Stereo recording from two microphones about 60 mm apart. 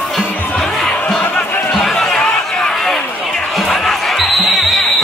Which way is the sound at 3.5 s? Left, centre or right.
Centre.